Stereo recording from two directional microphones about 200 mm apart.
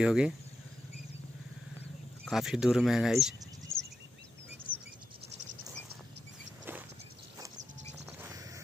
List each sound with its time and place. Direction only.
0.0 s speech: 5° right (ahead or behind)
2.2 s speech: centre (ahead or behind)
3.7 s a sound: 35° left (ahead or behind)
8.2 s music: 15° right (ahead or behind)